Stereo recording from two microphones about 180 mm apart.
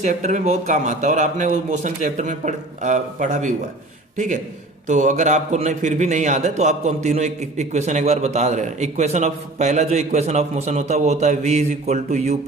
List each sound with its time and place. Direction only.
0.0 s a man's voice: 40° right (ahead or behind)
4.9 s a man's voice: 45° right (ahead or behind)